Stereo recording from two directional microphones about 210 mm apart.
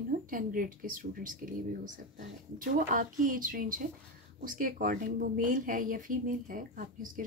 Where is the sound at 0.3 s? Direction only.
40° right (ahead or behind).